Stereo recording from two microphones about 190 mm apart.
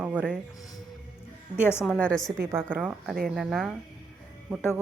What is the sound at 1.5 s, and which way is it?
Speech, 10° left (ahead or behind).